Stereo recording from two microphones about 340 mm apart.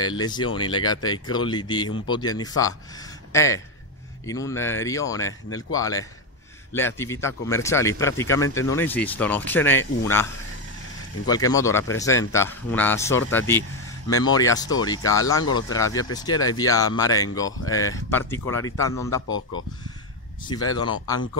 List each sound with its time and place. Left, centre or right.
0.0 s speech: centre
5.2 s speech: left
5.8 s speech: centre
11.2 s speech: centre
19.2 s speech: left
20.4 s speech: centre